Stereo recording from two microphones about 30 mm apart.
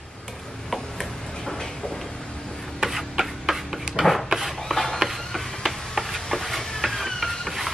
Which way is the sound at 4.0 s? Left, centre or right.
Right.